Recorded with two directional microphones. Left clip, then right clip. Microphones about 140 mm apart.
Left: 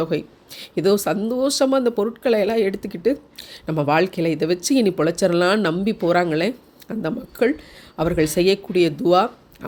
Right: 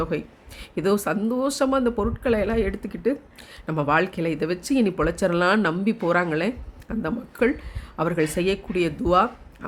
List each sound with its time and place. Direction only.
0.0 s speech: 15° left (ahead or behind)